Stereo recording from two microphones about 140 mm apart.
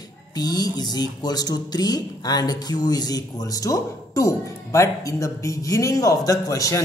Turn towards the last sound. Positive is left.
turn(degrees=25)  # may be behind; listen again after turning